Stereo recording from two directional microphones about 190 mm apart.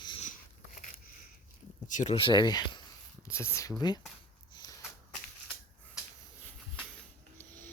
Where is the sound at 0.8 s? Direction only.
45° left (ahead or behind).